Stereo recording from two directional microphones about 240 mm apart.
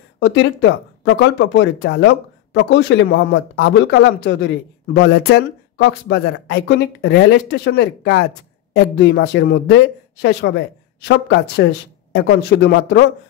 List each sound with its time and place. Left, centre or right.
0.2 s speech: left